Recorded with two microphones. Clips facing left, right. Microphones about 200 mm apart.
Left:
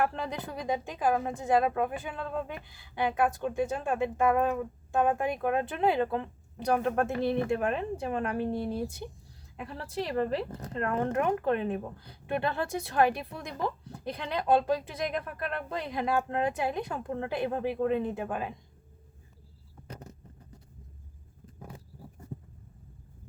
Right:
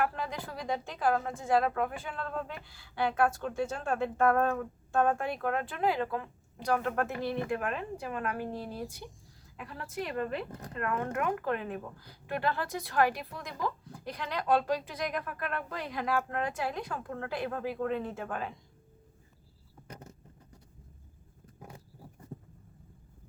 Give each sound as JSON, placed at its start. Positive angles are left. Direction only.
{"t": 0.0, "sound": "a woman's voice", "side_deg": 25}